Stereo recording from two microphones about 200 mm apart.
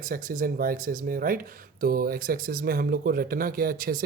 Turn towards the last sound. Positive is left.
turn(degrees=-45)  # may be behind; listen again after turning